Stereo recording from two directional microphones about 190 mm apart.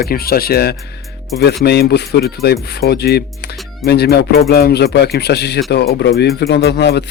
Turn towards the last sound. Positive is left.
turn(degrees=60)  # may be behind; listen again after turning